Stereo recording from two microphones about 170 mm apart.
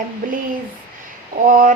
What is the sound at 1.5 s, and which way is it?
Speech, 50° right (ahead or behind).